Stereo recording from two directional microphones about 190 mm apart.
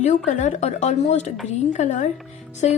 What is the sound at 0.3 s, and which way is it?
A woman's voice, 40° left (ahead or behind).